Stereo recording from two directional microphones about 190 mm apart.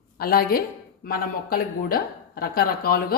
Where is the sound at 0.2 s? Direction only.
55° left (ahead or behind).